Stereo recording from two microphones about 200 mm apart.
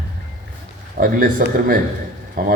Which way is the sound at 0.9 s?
45° right (ahead or behind).